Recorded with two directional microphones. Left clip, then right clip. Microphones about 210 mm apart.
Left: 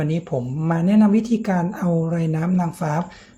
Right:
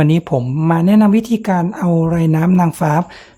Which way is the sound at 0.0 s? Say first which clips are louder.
Right 8 dB; 35° right (ahead or behind).